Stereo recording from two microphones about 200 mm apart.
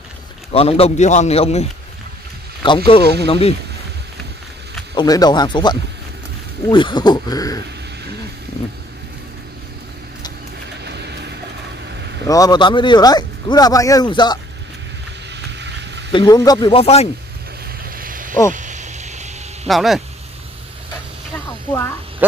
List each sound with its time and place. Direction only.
0.5 s speech: 30° left (ahead or behind)
4.9 s speech: 20° left (ahead or behind)
10.8 s music: 55° right (ahead or behind)
12.3 s speech: 20° left (ahead or behind)
15.6 s a sound: 60° right (ahead or behind)
16.1 s speech: 20° left (ahead or behind)
17.8 s a sound: 45° right (ahead or behind)
19.7 s speech: centre (ahead or behind)